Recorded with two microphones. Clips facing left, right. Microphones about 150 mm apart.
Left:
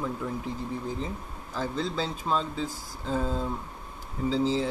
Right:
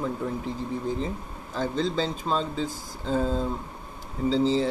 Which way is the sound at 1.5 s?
5° left (ahead or behind).